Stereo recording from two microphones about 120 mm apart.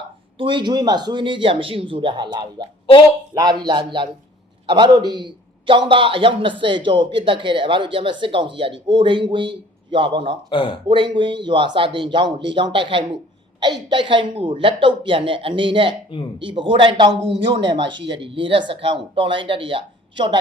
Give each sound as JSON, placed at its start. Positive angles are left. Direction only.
{"t": 0.3, "sound": "a man's voice", "side_deg": -45}